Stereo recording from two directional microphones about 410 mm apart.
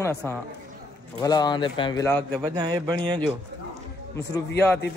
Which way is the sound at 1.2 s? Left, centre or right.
Centre.